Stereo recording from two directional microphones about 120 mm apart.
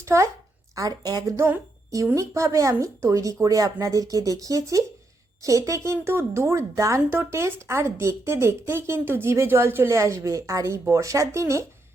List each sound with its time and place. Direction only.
0.0 s a woman's voice: 25° right (ahead or behind)